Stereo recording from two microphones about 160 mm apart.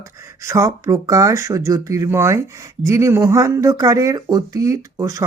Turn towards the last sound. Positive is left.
turn(degrees=-20)  # may be behind; listen again after turning